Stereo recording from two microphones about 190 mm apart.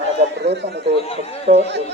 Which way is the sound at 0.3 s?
65° right (ahead or behind).